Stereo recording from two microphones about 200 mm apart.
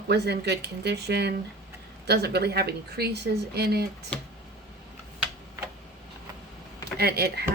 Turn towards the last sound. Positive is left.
turn(degrees=-50)  # may be behind; listen again after turning